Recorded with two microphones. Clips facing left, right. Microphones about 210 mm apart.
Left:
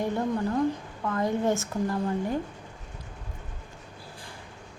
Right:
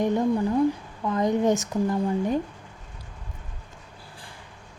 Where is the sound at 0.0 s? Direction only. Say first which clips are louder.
Right 5 dB; 20° right (ahead or behind).